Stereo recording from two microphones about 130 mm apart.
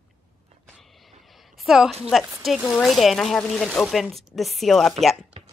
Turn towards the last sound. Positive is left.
turn(degrees=-45)  # may be behind; listen again after turning